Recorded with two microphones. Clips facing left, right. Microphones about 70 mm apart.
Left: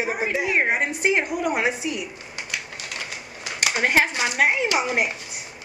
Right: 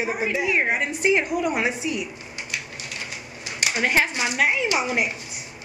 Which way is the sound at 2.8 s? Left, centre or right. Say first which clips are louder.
Left 1 dB; left.